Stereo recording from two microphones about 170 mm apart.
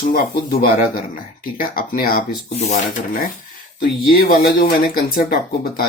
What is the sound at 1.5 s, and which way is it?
Speech, 60° left (ahead or behind).